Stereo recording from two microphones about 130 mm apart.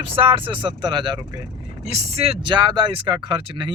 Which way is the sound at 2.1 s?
50° right (ahead or behind).